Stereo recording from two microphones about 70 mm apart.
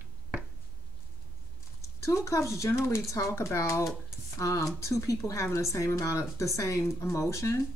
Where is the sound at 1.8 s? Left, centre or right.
Left.